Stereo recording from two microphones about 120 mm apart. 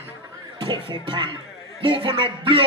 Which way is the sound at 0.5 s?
45° right (ahead or behind).